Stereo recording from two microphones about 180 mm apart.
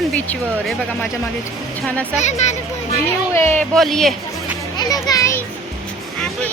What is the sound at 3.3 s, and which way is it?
Speech, 15° left (ahead or behind).